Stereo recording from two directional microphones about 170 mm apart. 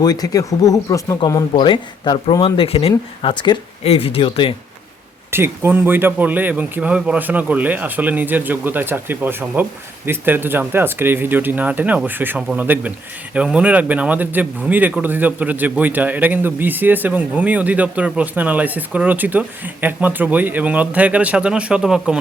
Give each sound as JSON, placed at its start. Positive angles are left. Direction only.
{"t": 0.0, "sound": "speech", "side_deg": 20}
{"t": 5.3, "sound": "a man's voice", "side_deg": -15}